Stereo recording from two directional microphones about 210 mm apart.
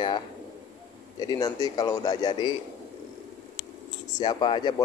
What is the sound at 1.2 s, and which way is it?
Speech, 20° left (ahead or behind).